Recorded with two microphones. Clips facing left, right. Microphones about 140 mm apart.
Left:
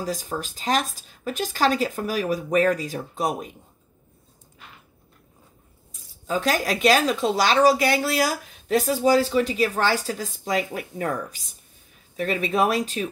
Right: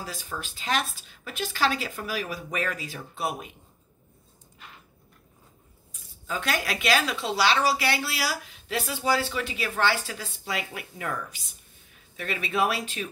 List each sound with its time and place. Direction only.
0.0 s speech: 40° left (ahead or behind)
6.2 s speech: 40° left (ahead or behind)